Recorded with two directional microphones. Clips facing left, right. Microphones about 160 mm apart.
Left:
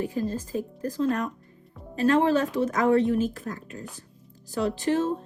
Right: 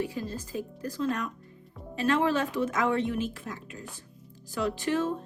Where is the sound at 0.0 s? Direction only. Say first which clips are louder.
Left 5 dB; 35° left (ahead or behind).